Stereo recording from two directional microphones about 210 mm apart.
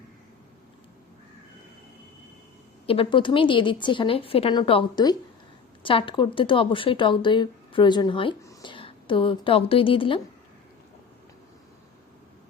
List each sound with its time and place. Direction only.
2.8 s speech: 25° left (ahead or behind)